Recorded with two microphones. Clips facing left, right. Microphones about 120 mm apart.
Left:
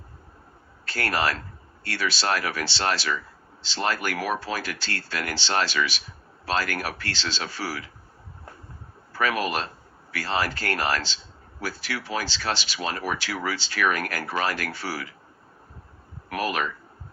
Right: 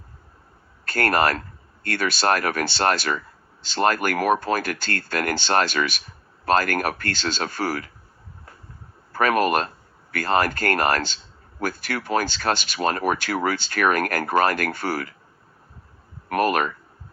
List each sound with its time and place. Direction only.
0.9 s speech: 50° right (ahead or behind)
9.1 s speech: 50° right (ahead or behind)
16.3 s speech: 50° right (ahead or behind)